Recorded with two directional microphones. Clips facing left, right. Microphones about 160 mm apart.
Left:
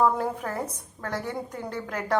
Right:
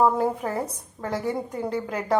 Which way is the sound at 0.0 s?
10° right (ahead or behind).